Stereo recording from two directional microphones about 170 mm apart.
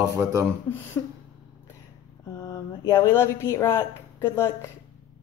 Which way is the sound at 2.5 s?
15° left (ahead or behind).